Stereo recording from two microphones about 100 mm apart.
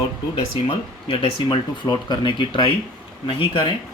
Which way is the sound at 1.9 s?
45° left (ahead or behind).